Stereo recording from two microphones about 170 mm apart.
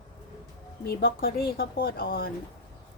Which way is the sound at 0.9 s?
65° left (ahead or behind).